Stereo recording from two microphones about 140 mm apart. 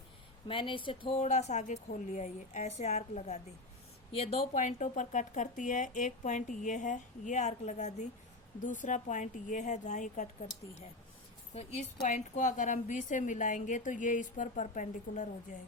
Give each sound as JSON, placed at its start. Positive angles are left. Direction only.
{"t": 0.4, "sound": "a woman's voice", "side_deg": 40}
{"t": 8.6, "sound": "a woman's voice", "side_deg": 65}